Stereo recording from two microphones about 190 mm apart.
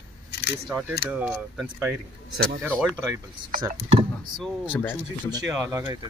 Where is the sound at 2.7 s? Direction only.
5° left (ahead or behind).